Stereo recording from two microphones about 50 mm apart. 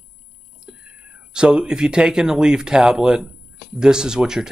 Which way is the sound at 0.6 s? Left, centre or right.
Centre.